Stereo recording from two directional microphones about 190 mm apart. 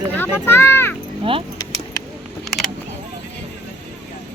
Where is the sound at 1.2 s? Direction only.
30° right (ahead or behind).